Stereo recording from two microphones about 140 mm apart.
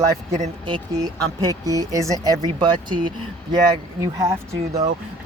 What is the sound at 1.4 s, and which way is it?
Speech, 25° right (ahead or behind).